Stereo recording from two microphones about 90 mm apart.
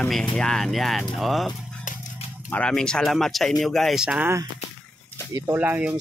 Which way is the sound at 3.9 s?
10° right (ahead or behind).